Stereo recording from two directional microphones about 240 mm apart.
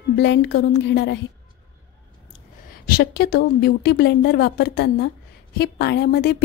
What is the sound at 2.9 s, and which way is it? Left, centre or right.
A woman's voice, left.